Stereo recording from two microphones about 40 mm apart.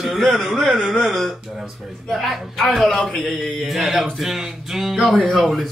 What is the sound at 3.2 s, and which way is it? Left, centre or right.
Music, centre.